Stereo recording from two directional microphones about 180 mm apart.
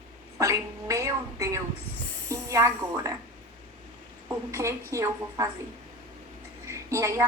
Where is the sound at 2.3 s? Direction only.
15° right (ahead or behind).